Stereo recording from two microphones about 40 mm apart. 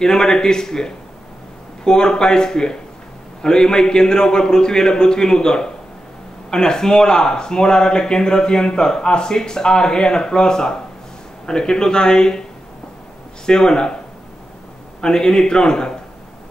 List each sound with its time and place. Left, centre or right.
0.0 s speech: centre
13.5 s speech: centre
15.0 s a man's voice: centre